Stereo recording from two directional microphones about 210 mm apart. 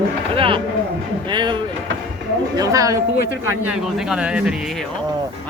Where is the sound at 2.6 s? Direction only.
15° right (ahead or behind).